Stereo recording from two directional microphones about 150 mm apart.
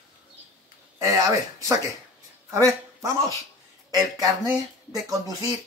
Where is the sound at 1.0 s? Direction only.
20° right (ahead or behind).